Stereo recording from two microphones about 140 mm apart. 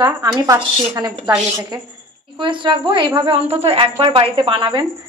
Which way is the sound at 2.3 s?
35° right (ahead or behind).